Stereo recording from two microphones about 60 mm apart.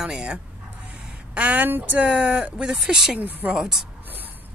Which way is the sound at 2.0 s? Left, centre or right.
Centre.